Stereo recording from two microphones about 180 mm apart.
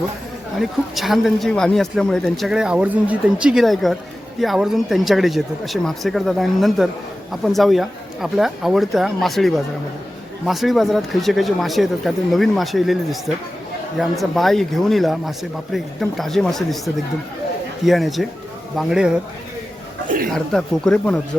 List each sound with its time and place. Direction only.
0.6 s speech: centre (ahead or behind)
20.1 s a sound: 55° right (ahead or behind)
20.3 s speech: 5° left (ahead or behind)